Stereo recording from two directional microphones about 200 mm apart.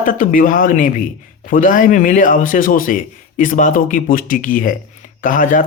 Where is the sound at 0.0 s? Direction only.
45° left (ahead or behind).